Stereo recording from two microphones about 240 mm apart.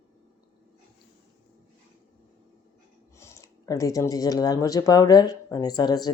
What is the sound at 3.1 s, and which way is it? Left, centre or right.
Speech, centre.